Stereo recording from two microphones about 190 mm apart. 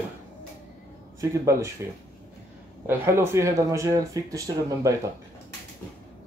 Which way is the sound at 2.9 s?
15° right (ahead or behind).